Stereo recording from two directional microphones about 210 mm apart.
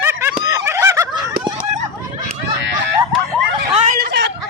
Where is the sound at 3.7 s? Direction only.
35° right (ahead or behind).